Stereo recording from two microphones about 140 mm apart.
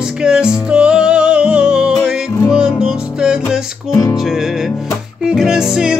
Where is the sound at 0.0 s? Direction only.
5° right (ahead or behind).